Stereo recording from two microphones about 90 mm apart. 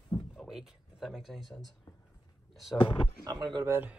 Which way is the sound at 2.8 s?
60° left (ahead or behind).